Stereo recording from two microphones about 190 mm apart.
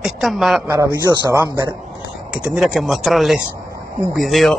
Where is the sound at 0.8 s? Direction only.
15° right (ahead or behind).